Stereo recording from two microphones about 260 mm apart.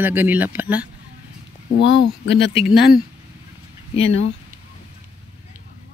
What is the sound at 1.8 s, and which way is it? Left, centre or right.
Speech, left.